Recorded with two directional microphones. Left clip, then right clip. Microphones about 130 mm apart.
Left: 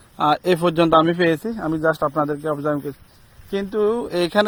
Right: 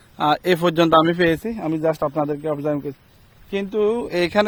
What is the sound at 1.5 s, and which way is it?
Speech, centre (ahead or behind).